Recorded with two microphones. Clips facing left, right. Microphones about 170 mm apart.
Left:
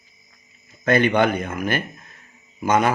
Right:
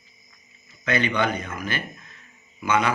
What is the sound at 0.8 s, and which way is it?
Speech, 50° left (ahead or behind).